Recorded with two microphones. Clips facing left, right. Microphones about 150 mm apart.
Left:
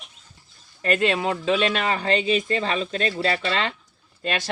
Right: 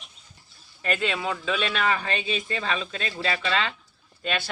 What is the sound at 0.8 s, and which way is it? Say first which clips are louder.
Speech: left 5 dB; 35° left (ahead or behind).